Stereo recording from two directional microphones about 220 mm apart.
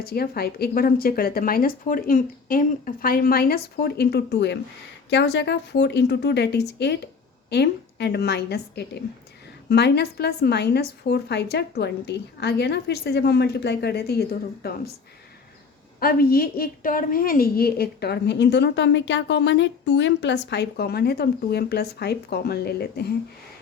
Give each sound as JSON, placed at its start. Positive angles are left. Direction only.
{"t": 0.0, "sound": "a woman's voice", "side_deg": 45}
{"t": 16.0, "sound": "a woman's voice", "side_deg": 45}